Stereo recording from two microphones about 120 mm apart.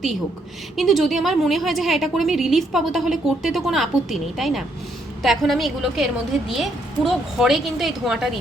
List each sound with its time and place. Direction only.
0.8 s a woman's voice: centre (ahead or behind)